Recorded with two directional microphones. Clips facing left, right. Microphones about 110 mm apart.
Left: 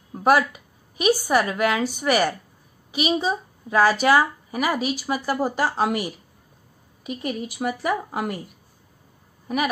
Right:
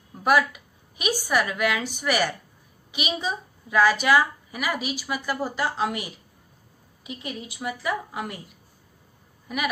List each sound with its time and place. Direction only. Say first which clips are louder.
0.1 s a woman's voice: left 3 dB; 40° left (ahead or behind)
7.1 s a woman's voice: left 7 dB; 50° left (ahead or behind)